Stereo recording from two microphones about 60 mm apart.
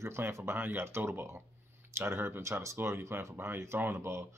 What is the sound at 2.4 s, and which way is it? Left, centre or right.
Speech, right.